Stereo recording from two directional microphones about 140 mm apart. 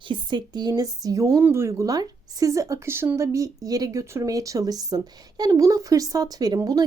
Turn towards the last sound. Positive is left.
turn(degrees=-25)  # may be behind; listen again after turning